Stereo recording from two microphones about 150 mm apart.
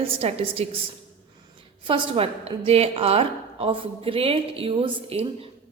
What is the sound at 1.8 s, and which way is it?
A woman's voice, 35° right (ahead or behind).